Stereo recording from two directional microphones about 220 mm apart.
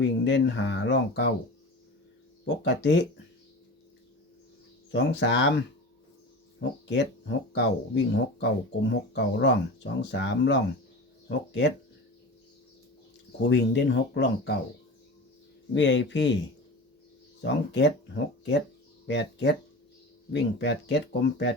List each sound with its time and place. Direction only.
0.0 s speech: 55° left (ahead or behind)
2.4 s speech: 55° left (ahead or behind)
4.9 s speech: 55° left (ahead or behind)
6.6 s speech: 50° left (ahead or behind)
13.5 s speech: 50° left (ahead or behind)
15.7 s speech: 55° left (ahead or behind)
17.4 s speech: 55° left (ahead or behind)